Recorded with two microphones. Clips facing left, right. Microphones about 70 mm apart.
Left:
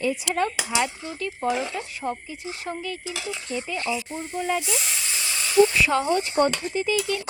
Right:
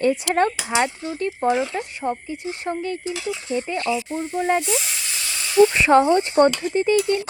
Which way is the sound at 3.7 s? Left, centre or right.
Right.